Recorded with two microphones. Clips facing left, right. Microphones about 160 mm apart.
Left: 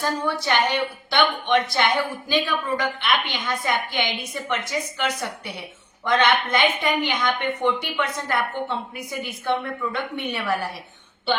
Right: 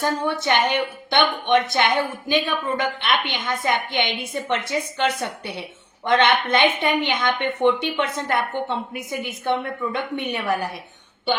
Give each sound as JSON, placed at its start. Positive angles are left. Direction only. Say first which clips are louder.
{"t": 0.0, "sound": "speech", "louder": "right 2 dB", "side_deg": -20}